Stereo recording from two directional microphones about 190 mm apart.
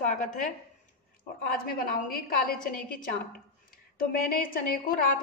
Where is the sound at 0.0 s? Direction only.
40° left (ahead or behind).